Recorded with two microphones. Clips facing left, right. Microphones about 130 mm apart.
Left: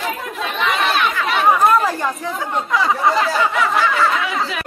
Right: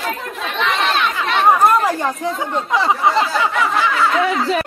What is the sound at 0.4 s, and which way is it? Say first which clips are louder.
Chatter: even; 5° left (ahead or behind).